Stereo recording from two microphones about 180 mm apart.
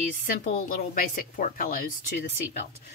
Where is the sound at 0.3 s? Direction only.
50° left (ahead or behind).